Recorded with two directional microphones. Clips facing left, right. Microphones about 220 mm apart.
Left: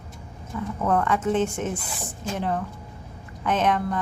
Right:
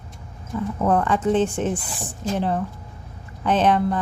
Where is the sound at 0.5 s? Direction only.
30° right (ahead or behind).